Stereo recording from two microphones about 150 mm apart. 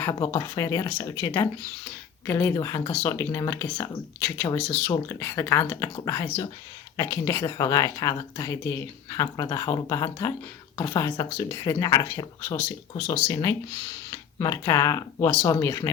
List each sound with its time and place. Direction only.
0.0 s speech: 25° left (ahead or behind)